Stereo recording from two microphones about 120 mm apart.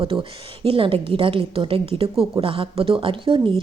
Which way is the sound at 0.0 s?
50° right (ahead or behind).